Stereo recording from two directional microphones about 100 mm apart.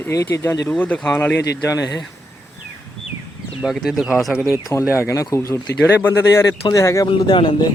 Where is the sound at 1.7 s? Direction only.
35° left (ahead or behind).